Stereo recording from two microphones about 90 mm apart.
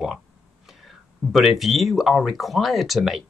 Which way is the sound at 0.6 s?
Centre (ahead or behind).